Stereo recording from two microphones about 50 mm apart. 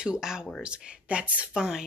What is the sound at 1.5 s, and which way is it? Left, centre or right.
Speech, centre.